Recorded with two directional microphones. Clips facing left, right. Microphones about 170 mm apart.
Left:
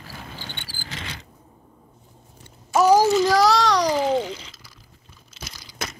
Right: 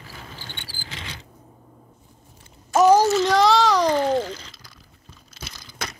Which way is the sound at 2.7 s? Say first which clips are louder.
Right 1 dB; centre (ahead or behind).